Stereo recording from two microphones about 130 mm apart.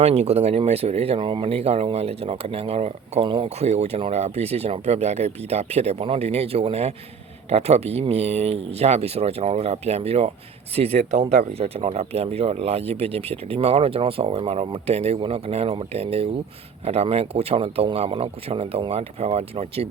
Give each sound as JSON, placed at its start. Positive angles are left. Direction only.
{"t": 0.0, "sound": "speech", "side_deg": -55}
{"t": 3.6, "sound": "speech", "side_deg": -55}